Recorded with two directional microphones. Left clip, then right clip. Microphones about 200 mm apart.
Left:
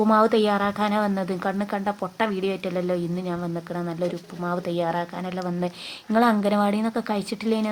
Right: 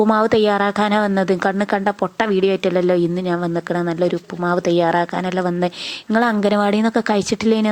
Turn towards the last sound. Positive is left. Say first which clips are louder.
# right 8 dB
turn(degrees=-30)  # may be behind; listen again after turning